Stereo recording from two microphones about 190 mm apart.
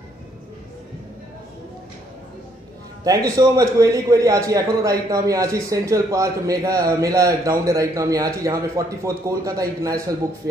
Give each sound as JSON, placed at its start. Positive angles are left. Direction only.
{"t": 3.0, "sound": "a man's voice", "side_deg": -20}